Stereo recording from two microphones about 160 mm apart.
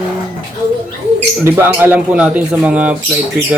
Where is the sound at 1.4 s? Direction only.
15° right (ahead or behind).